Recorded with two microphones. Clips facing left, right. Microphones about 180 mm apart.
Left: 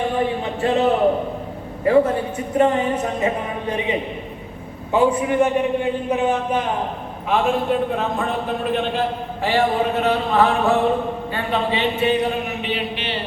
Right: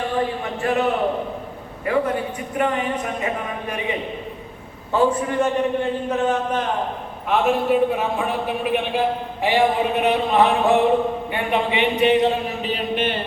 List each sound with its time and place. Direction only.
0.6 s a man's voice: 25° left (ahead or behind)
7.3 s a man's voice: centre (ahead or behind); by 12.3 s 20° right (ahead or behind)
12.6 s music: 45° right (ahead or behind)